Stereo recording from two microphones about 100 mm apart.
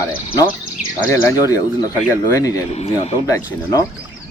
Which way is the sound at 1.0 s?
35° left (ahead or behind).